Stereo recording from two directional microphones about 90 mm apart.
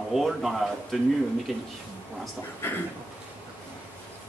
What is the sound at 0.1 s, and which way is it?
Speech, centre (ahead or behind).